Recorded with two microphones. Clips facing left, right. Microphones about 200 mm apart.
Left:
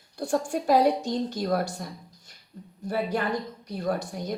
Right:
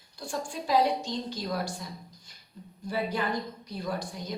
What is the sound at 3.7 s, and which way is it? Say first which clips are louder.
Speech: left 5 dB; 60° left (ahead or behind).